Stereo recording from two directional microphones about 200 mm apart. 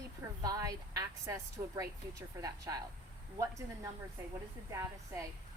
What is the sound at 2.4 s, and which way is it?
Speech, 15° right (ahead or behind).